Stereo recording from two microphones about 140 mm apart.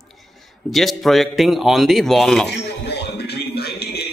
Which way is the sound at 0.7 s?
Centre (ahead or behind).